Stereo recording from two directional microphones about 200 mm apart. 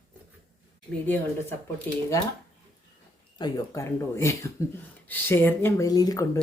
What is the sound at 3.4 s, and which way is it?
Speech, 15° left (ahead or behind).